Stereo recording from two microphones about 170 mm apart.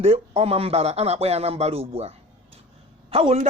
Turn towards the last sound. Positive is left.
turn(degrees=-35)  # may be behind; listen again after turning